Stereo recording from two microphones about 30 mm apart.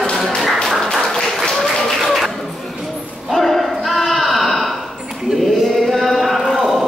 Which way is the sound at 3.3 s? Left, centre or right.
Centre.